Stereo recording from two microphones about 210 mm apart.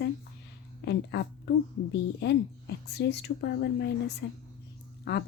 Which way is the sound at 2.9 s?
50° left (ahead or behind).